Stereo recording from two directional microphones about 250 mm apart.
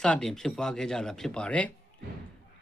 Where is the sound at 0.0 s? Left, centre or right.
Centre.